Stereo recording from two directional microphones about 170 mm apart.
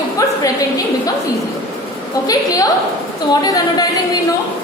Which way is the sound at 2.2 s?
20° left (ahead or behind).